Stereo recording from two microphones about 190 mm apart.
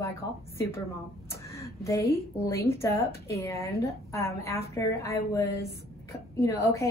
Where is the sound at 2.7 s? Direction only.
15° left (ahead or behind).